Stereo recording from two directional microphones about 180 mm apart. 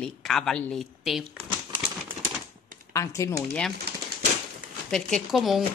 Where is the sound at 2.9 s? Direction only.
15° left (ahead or behind).